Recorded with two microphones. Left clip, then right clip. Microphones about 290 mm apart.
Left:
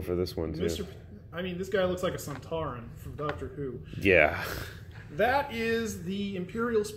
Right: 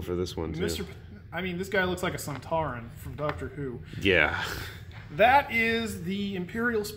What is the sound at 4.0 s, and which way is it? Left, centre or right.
Speech, centre.